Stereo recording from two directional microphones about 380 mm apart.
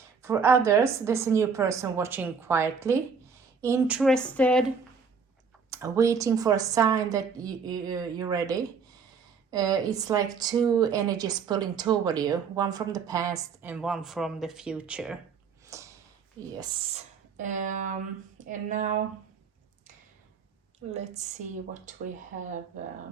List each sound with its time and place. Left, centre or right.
0.2 s speech: centre
5.7 s speech: centre
15.6 s a sound: centre
16.6 s speech: centre
20.7 s speech: centre